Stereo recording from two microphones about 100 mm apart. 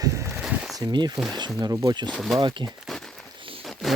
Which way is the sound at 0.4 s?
5° right (ahead or behind).